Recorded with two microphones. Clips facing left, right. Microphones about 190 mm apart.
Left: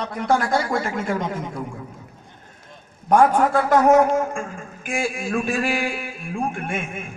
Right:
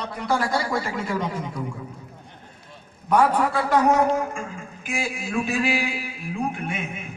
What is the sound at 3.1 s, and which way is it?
A man's voice, 50° left (ahead or behind).